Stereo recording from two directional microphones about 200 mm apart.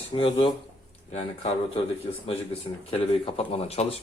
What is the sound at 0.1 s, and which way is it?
Speech, 25° left (ahead or behind).